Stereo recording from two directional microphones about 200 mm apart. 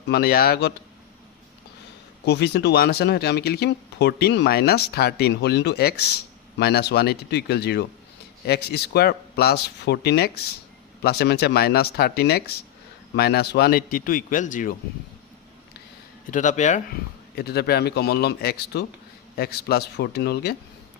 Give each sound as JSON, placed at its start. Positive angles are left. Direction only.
{"t": 0.1, "sound": "speech", "side_deg": 50}
{"t": 2.2, "sound": "speech", "side_deg": 55}
{"t": 16.3, "sound": "speech", "side_deg": 40}
{"t": 17.3, "sound": "speech", "side_deg": 50}